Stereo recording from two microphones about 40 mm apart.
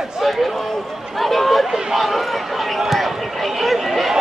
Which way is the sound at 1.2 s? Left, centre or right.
Centre.